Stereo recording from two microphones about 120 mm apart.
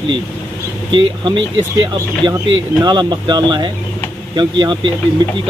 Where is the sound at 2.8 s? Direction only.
35° right (ahead or behind).